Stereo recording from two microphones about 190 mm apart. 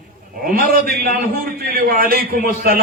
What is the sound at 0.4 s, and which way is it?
A man's voice, 50° right (ahead or behind).